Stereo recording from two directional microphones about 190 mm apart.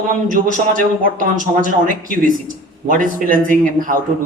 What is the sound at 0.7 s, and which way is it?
A man's voice, 45° right (ahead or behind).